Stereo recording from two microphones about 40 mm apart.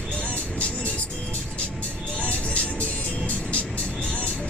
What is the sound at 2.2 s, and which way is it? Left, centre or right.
Music, left.